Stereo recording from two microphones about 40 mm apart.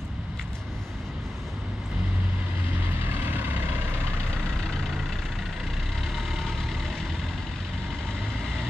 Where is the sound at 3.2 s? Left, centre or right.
Right.